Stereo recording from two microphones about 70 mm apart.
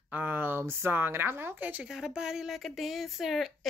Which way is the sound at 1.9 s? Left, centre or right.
Centre.